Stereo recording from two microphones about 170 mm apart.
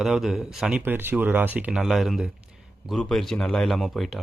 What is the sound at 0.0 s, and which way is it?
Speech, centre (ahead or behind).